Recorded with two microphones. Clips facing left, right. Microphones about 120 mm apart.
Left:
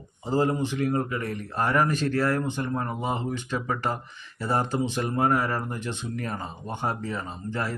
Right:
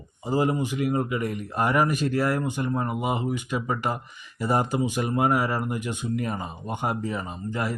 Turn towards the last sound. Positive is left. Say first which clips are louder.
# right 2 dB
turn(degrees=-15)  # may be behind; listen again after turning